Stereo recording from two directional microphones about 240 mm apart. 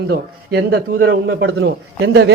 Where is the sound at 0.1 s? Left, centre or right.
Right.